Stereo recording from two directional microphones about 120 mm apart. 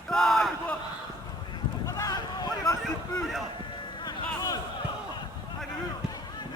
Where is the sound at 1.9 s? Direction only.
30° left (ahead or behind).